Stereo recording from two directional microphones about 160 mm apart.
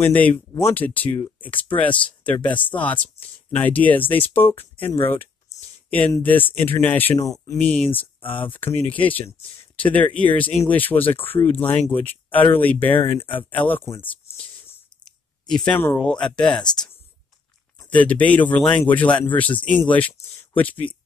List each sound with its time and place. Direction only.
0.0 s speech: 10° left (ahead or behind)
5.5 s a sound: 15° left (ahead or behind)
5.9 s speech: 10° left (ahead or behind)
7.5 s speech: 10° left (ahead or behind)
15.0 s a sound: 5° left (ahead or behind)
15.9 s speech: 5° left (ahead or behind)
17.9 s speech: 10° left (ahead or behind)